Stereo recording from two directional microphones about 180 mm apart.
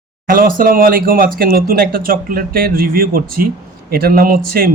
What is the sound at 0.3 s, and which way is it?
Speech, 50° right (ahead or behind).